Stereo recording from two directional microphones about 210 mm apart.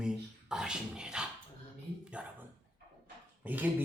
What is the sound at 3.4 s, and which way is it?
Speech, 10° right (ahead or behind).